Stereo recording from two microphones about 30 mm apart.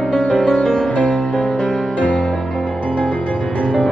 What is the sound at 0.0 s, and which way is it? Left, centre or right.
Music, left.